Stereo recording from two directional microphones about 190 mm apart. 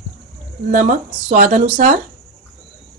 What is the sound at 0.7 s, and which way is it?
Speech, 45° right (ahead or behind).